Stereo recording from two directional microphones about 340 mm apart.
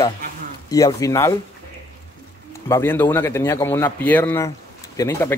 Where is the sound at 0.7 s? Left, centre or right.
Centre.